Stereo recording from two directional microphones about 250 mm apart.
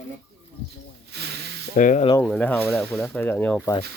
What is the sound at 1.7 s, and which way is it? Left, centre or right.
Speech, left.